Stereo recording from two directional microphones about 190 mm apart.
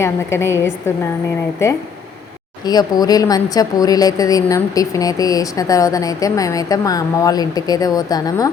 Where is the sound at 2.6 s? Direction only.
20° left (ahead or behind).